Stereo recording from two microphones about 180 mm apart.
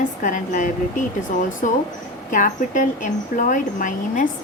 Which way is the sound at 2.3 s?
45° left (ahead or behind).